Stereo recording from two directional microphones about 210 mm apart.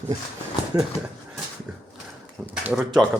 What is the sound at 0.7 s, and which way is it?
Speech, 20° right (ahead or behind).